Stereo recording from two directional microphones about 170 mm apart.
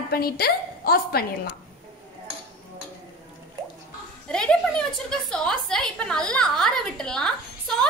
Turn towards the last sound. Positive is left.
turn(degrees=5)  # may be behind; listen again after turning